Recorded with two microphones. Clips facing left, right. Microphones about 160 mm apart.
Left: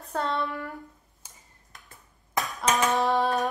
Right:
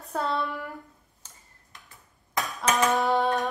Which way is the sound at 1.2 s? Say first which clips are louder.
Left 1 dB; 10° left (ahead or behind).